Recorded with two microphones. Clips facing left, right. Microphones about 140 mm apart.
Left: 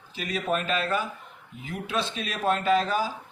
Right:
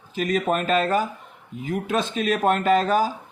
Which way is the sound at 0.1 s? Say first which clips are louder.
Right 6 dB; 45° right (ahead or behind).